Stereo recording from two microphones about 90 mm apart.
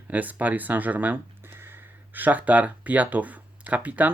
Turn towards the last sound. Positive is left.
turn(degrees=-15)  # may be behind; listen again after turning